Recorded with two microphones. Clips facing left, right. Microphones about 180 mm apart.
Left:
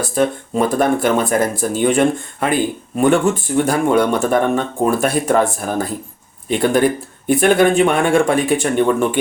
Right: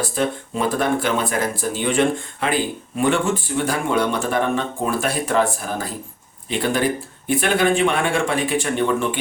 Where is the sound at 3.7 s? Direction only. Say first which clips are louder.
Left 6 dB; 45° left (ahead or behind).